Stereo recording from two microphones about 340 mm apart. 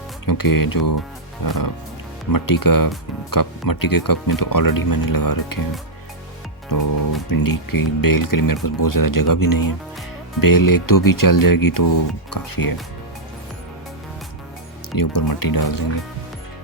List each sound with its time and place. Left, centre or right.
0.3 s speech: left
1.5 s music: left
2.3 s speech: left
6.7 s speech: left
14.9 s speech: left